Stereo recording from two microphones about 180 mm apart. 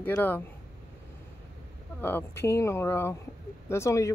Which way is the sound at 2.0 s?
10° left (ahead or behind).